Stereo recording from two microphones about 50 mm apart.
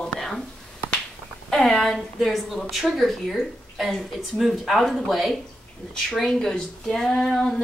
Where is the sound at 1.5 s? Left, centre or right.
Centre.